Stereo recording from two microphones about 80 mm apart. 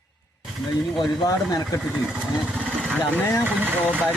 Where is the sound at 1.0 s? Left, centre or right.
Left.